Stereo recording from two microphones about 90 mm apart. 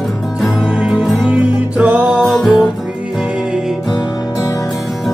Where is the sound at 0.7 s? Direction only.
10° right (ahead or behind).